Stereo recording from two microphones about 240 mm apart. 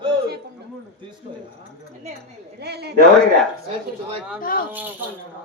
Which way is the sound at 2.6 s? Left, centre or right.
Right.